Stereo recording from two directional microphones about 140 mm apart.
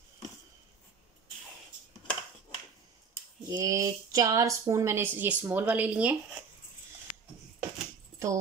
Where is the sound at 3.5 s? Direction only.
25° right (ahead or behind).